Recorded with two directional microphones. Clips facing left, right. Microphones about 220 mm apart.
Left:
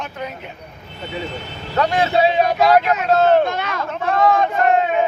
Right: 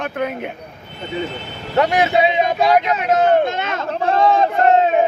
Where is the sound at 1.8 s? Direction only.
20° right (ahead or behind).